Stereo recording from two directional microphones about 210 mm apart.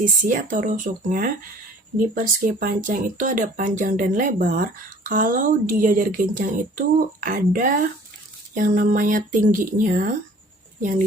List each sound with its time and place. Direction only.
0.0 s a woman's voice: 40° right (ahead or behind)